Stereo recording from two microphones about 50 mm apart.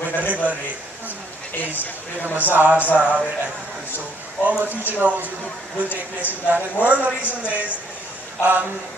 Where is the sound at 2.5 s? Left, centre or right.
Right.